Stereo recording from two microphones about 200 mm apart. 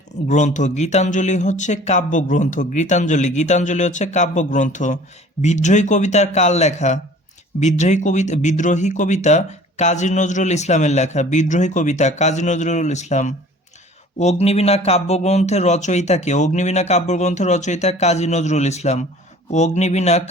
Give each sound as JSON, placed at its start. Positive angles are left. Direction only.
{"t": 0.3, "sound": "speech", "side_deg": 35}